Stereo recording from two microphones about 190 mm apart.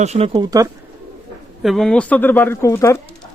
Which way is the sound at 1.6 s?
Centre (ahead or behind).